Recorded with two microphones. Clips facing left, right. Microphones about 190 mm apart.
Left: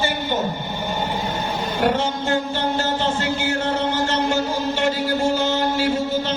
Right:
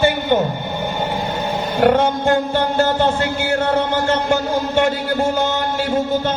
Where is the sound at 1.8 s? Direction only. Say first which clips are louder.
Right 7 dB; 55° right (ahead or behind).